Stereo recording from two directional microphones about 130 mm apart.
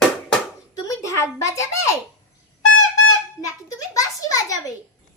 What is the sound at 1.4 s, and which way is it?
Speech, 25° left (ahead or behind).